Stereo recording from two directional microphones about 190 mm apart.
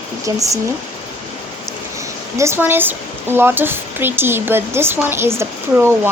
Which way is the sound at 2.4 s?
10° right (ahead or behind).